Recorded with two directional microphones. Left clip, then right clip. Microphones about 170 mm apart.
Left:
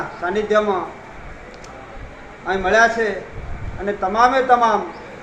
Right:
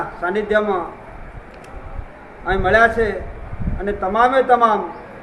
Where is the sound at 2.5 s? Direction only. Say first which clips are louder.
Right 1 dB; 15° right (ahead or behind).